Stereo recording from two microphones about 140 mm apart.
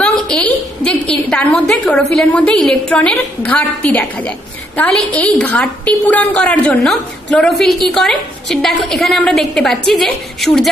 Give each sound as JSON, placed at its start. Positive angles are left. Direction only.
{"t": 0.0, "sound": "a woman's voice", "side_deg": 5}